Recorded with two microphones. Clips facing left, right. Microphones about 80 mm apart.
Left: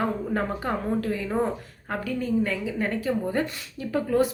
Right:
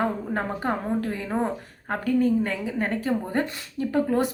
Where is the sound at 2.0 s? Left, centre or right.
Right.